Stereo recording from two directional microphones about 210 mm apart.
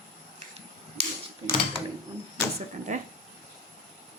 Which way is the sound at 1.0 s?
30° right (ahead or behind).